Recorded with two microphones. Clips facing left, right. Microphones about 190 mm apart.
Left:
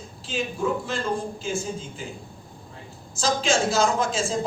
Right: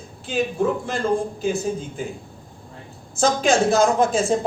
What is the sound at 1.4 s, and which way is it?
Speech, 60° right (ahead or behind).